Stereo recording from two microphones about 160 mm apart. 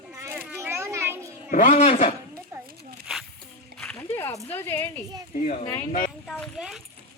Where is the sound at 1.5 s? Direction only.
55° left (ahead or behind).